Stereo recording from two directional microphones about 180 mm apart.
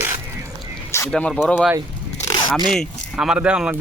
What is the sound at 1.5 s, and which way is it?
Speech, 5° right (ahead or behind).